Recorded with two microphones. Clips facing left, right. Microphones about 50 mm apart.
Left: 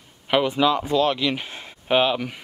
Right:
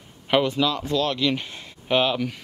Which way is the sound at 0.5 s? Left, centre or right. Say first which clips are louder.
Left 3 dB; left.